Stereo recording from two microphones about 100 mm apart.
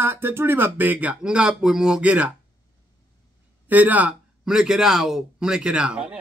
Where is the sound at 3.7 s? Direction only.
15° right (ahead or behind).